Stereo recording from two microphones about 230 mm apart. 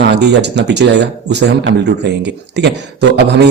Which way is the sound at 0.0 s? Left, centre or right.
Right.